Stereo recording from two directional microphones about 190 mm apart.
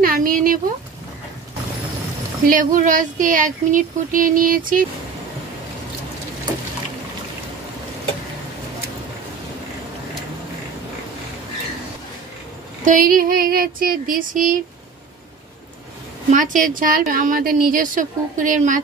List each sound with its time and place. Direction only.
0.0 s a sound: 50° right (ahead or behind)
2.5 s a woman's voice: 45° right (ahead or behind)
12.8 s a woman's voice: 45° right (ahead or behind)
16.3 s a woman's voice: 45° right (ahead or behind)